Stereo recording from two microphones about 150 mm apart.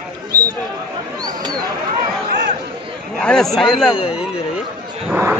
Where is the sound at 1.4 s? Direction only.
25° right (ahead or behind).